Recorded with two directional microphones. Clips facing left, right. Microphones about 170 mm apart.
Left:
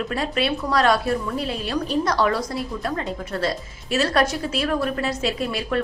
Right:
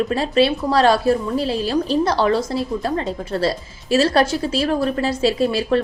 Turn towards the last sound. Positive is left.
turn(degrees=-30)  # may be behind; listen again after turning